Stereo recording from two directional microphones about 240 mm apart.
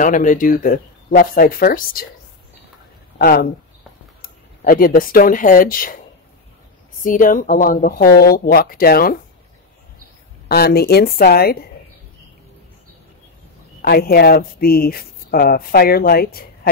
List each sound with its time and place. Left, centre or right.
0.0 s speech: left
3.2 s speech: left
7.0 s speech: left
10.5 s speech: left
13.7 s speech: left